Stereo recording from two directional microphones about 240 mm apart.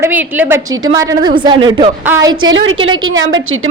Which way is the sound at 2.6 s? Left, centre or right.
Right.